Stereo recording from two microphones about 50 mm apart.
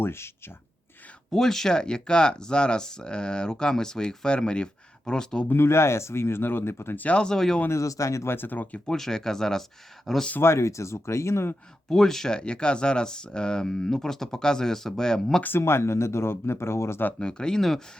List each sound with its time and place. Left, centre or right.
0.0 s speech: left
1.3 s speech: centre
5.5 s speech: left
6.9 s speech: left
7.2 s speech: centre
7.7 s speech: left
8.3 s speech: left
8.9 s speech: centre
10.4 s speech: left
11.9 s speech: centre
15.4 s speech: left
17.2 s speech: centre
17.6 s speech: centre